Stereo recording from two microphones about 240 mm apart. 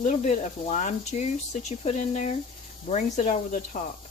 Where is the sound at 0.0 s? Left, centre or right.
Left.